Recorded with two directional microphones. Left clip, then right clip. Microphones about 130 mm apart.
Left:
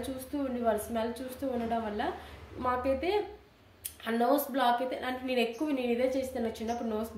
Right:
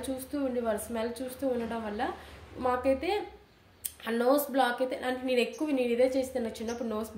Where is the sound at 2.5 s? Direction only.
35° right (ahead or behind).